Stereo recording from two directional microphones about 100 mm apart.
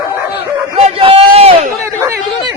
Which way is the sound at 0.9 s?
70° right (ahead or behind).